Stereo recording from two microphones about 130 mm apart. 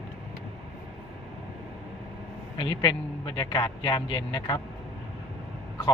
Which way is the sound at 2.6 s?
40° left (ahead or behind).